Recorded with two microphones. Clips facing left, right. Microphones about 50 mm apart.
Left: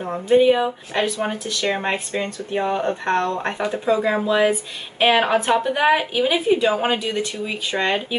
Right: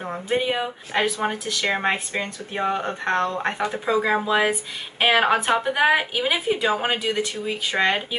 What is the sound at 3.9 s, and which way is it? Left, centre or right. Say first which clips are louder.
A woman's voice: right 1 dB; right.